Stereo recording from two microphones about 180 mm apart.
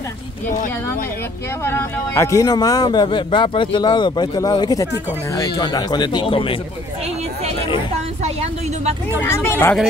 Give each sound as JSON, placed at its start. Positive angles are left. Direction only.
{"t": 1.6, "sound": "a man's voice", "side_deg": 15}
{"t": 8.2, "sound": "a sound", "side_deg": -35}
{"t": 9.2, "sound": "speech", "side_deg": 15}